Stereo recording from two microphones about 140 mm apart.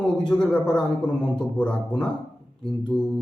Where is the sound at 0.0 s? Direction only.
5° left (ahead or behind).